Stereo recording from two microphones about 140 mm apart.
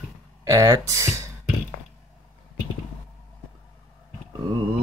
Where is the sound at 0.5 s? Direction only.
20° right (ahead or behind).